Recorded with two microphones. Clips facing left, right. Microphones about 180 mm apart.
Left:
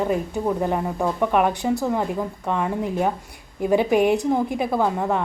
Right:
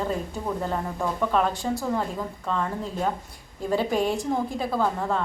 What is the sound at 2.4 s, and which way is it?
A woman's voice, 15° left (ahead or behind).